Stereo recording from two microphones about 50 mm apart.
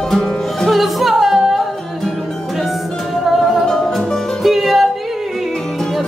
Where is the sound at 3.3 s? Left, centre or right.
Centre.